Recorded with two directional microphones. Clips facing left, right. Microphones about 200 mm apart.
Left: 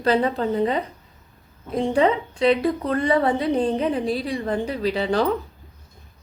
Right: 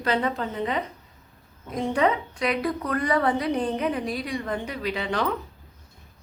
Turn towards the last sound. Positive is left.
turn(degrees=35)  # may be behind; listen again after turning